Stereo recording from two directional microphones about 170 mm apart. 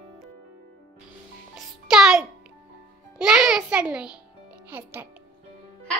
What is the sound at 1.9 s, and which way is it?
A child's voice, 5° right (ahead or behind).